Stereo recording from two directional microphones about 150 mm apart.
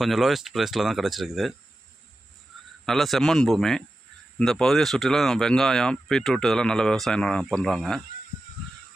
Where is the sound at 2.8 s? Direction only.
Centre (ahead or behind).